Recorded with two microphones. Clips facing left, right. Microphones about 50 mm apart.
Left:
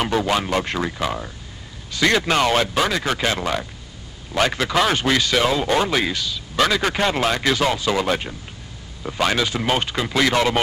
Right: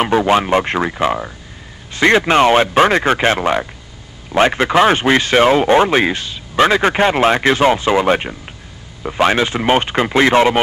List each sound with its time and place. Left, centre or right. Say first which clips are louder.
0.0 s speech: right 7 dB; right